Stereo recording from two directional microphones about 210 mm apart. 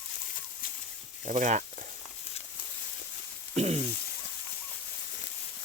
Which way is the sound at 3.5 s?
30° right (ahead or behind).